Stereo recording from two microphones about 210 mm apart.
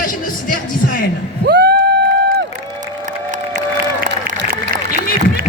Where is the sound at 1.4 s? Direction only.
50° right (ahead or behind).